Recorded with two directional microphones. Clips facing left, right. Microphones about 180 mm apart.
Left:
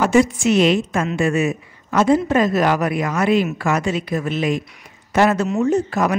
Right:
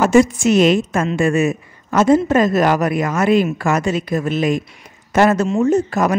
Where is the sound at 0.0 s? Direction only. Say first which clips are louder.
Right 3 dB; 45° right (ahead or behind).